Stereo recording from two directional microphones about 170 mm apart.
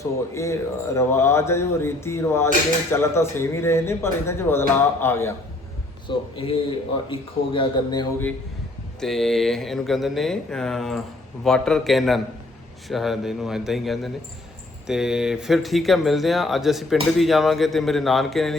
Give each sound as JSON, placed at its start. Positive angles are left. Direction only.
{"t": 0.0, "sound": "speech", "side_deg": 15}
{"t": 6.1, "sound": "a man's voice", "side_deg": 30}
{"t": 9.0, "sound": "speech", "side_deg": 0}